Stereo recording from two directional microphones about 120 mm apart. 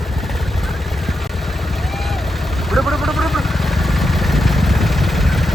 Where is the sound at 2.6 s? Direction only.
Centre (ahead or behind).